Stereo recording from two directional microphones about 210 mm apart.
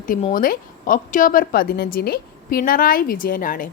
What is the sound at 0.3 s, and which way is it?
Speech, 40° left (ahead or behind).